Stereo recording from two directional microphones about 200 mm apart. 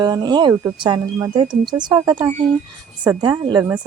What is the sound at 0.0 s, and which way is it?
A woman's voice, 20° right (ahead or behind).